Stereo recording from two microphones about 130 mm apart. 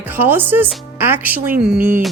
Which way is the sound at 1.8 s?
90° right.